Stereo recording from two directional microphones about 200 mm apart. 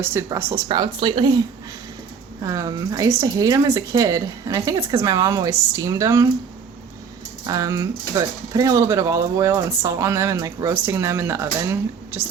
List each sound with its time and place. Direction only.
0.0 s speech: 15° right (ahead or behind)
2.4 s speech: 15° right (ahead or behind)
7.4 s speech: 15° right (ahead or behind)